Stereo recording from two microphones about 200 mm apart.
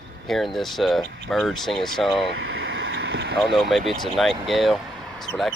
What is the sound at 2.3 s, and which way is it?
Vehicle, 90° right.